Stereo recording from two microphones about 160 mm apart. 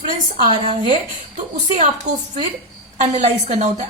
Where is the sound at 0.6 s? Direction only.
35° right (ahead or behind).